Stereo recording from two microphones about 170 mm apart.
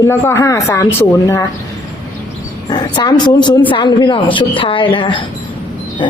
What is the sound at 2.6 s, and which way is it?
Speech, 25° left (ahead or behind).